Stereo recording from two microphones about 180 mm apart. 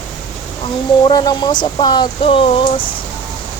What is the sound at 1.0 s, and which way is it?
Speech, 20° left (ahead or behind).